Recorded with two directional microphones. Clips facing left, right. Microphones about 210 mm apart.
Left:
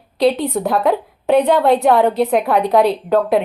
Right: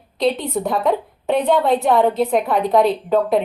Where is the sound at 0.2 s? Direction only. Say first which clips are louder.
Left 4 dB; centre (ahead or behind).